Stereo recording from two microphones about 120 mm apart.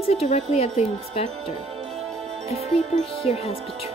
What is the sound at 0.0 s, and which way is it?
Speech, 60° left (ahead or behind).